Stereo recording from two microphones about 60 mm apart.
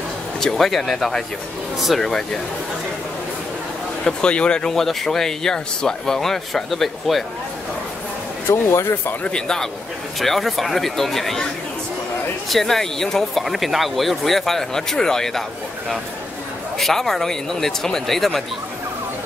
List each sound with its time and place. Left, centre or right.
0.4 s speech: centre
4.0 s speech: centre
8.5 s speech: left
9.2 s speech: centre
12.4 s speech: centre
16.7 s speech: centre